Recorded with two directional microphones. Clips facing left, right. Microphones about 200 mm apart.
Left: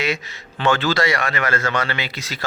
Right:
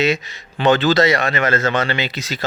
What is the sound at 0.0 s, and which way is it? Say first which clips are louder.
A man's voice: right 6 dB; 20° right (ahead or behind).